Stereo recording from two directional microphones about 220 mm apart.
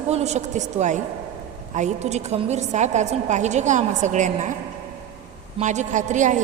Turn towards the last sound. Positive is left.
turn(degrees=-35)  # may be behind; listen again after turning